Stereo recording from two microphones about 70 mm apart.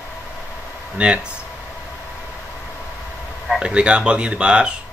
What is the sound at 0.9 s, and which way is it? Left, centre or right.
Speech, centre.